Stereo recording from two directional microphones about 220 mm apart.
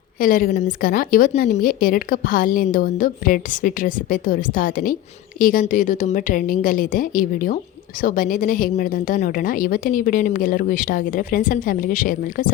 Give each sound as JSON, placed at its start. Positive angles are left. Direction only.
{"t": 0.2, "sound": "a woman's voice", "side_deg": 40}